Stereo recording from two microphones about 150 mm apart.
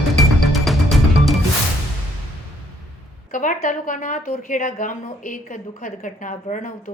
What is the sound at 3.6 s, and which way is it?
A woman's voice, 65° left (ahead or behind).